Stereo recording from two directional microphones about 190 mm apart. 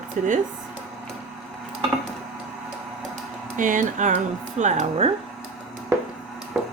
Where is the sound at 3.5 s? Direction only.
45° right (ahead or behind).